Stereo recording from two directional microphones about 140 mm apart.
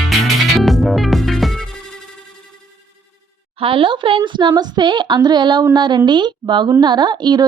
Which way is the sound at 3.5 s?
40° right (ahead or behind).